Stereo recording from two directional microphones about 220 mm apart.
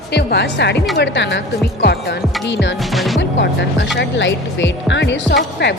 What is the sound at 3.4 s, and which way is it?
Speech, 55° left (ahead or behind).